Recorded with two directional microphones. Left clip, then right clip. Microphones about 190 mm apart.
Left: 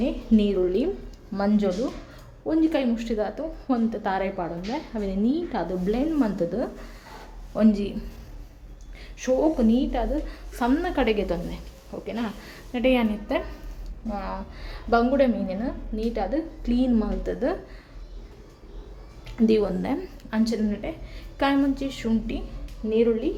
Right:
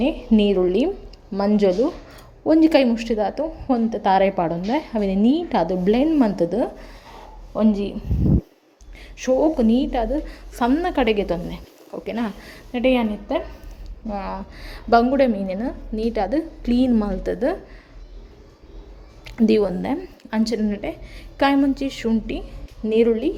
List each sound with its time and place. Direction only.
0.0 s a woman's voice: 20° right (ahead or behind)
2.5 s a woman's voice: 25° right (ahead or behind)
7.5 s a woman's voice: 10° right (ahead or behind)
9.0 s a woman's voice: 20° right (ahead or behind)
12.7 s a woman's voice: 15° right (ahead or behind)
14.1 s a woman's voice: 30° right (ahead or behind)
19.2 s a woman's voice: 25° right (ahead or behind)
22.9 s speech: 35° right (ahead or behind)